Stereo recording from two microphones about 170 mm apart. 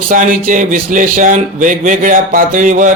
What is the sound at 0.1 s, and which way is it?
Speech, 50° right (ahead or behind).